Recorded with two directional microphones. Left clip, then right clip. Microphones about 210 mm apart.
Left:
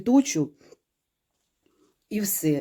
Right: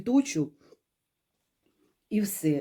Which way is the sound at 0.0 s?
30° left (ahead or behind).